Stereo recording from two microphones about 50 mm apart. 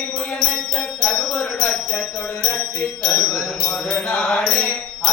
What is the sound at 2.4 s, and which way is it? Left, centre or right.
Music, left.